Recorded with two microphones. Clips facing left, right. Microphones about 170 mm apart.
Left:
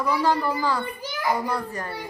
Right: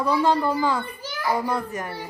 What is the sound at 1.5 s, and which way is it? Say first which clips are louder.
Speech: right 2 dB; 20° right (ahead or behind).